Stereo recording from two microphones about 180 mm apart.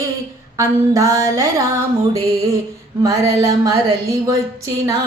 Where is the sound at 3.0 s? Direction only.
20° right (ahead or behind).